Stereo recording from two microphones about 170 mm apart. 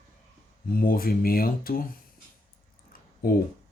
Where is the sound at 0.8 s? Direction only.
60° left (ahead or behind).